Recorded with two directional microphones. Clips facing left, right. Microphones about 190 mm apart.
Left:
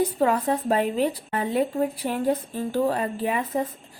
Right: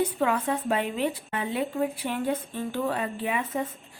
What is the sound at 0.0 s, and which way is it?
Speech, 35° left (ahead or behind).